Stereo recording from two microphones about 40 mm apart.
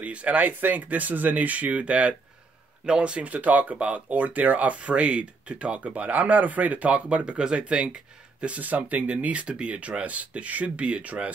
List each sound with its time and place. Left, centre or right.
0.0 s speech: right
0.4 s speech: right
9.2 s speech: right